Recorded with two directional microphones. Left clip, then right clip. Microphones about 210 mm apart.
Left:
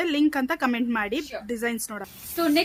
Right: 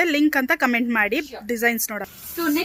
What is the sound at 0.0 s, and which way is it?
A woman's voice, 5° right (ahead or behind).